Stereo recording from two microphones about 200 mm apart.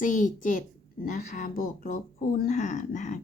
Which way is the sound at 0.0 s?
40° left (ahead or behind).